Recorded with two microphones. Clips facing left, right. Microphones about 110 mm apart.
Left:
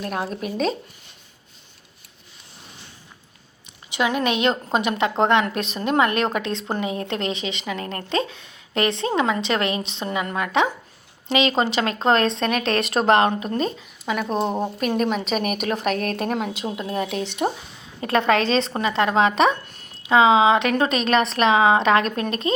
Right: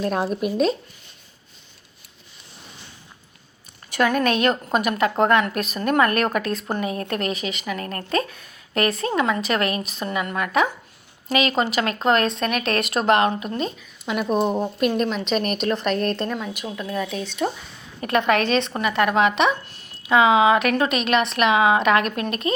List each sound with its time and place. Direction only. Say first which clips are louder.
0.0 s speech: right 4 dB; 25° right (ahead or behind)
0.3 s speech: right 5 dB; 10° right (ahead or behind)
3.8 s a woman's voice: right 2 dB; 15° left (ahead or behind); by 14.1 s 35° left (ahead or behind)
14.1 s a woman's voice: right 2 dB; 5° right (ahead or behind)
16.2 s speech: left 3 dB; 70° left (ahead or behind)
16.5 s a woman's voice: left 2 dB; 25° left (ahead or behind)
17.1 s speech: left 2 dB; 80° left
18.0 s speech: left 1 dB; 30° left (ahead or behind)